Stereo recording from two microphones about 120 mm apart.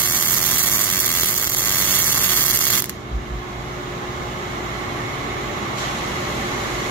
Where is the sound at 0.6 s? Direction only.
15° left (ahead or behind).